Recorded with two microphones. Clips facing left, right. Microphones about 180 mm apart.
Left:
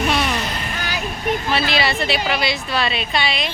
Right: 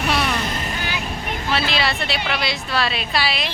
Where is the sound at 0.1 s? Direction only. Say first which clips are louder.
Left 1 dB; centre (ahead or behind).